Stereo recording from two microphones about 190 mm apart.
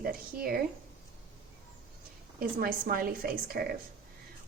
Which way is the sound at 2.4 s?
50° right (ahead or behind).